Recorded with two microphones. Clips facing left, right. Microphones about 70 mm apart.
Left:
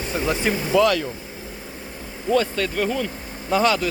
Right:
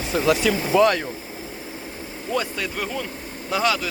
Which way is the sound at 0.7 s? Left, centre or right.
Right.